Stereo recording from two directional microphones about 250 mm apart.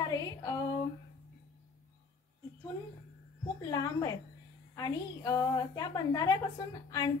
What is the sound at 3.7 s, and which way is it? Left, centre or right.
A woman's voice, centre.